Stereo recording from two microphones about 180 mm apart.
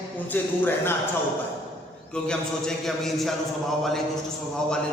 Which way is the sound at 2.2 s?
Centre (ahead or behind).